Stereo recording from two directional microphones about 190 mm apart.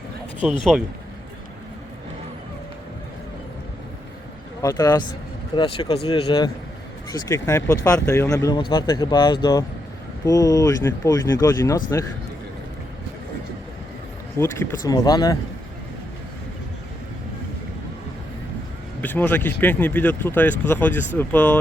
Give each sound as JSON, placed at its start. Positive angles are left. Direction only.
{"t": 0.7, "sound": "speech", "side_deg": 0}
{"t": 4.6, "sound": "speech", "side_deg": 20}
{"t": 14.3, "sound": "speech", "side_deg": 15}
{"t": 19.0, "sound": "speech", "side_deg": 10}